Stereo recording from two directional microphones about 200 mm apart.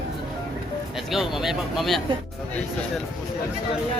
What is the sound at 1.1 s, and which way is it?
Speech, centre (ahead or behind).